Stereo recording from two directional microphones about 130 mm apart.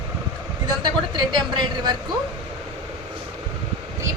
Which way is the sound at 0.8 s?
35° right (ahead or behind).